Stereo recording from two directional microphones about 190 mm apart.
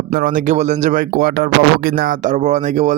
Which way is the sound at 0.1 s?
50° right (ahead or behind).